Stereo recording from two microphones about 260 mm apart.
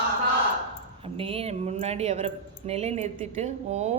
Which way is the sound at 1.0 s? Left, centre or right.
Right.